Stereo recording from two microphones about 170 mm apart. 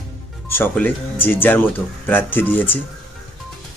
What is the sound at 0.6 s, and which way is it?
Speech, 10° left (ahead or behind).